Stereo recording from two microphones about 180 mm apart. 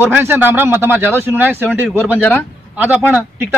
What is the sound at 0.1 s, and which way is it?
A man's voice, 10° right (ahead or behind).